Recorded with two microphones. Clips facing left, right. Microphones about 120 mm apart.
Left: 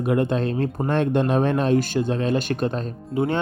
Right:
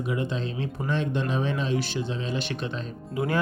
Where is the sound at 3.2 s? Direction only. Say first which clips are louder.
Left 4 dB; 30° left (ahead or behind).